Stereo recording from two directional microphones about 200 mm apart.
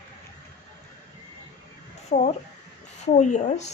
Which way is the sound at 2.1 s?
40° left (ahead or behind).